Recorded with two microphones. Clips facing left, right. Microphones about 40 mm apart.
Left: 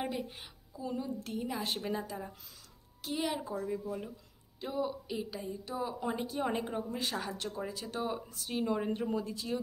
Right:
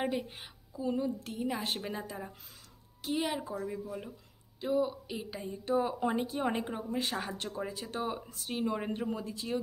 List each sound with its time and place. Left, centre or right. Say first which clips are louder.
0.0 s a woman's voice: right 3 dB; centre
5.7 s speech: right 8 dB; right
6.0 s speech: right 3 dB; centre